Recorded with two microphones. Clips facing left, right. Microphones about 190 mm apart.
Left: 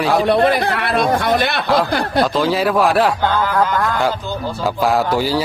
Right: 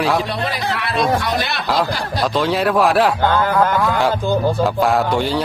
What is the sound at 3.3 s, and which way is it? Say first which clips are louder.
Speech: right 2 dB; 55° right (ahead or behind).